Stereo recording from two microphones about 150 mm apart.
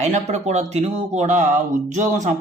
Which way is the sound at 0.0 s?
50° right (ahead or behind).